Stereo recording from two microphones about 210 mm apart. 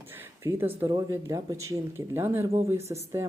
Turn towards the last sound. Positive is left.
turn(degrees=-15)  # may be behind; listen again after turning